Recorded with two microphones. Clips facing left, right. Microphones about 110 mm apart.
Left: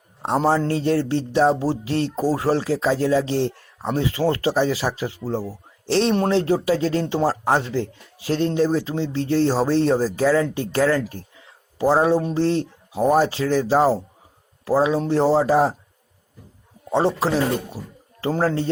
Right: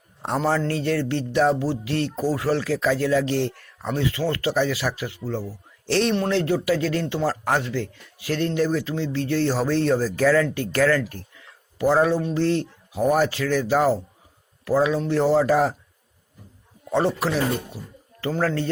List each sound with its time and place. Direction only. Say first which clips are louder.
0.2 s speech: left 3 dB; 25° left (ahead or behind)
11.3 s a sound: left 2 dB; 25° left (ahead or behind)
12.2 s speech: left 1 dB; 30° left (ahead or behind)
16.9 s speech: left 2 dB; 25° left (ahead or behind)